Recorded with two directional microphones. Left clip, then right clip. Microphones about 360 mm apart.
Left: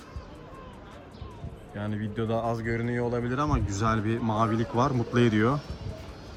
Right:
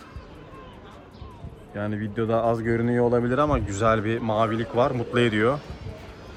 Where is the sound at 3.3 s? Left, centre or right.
Centre.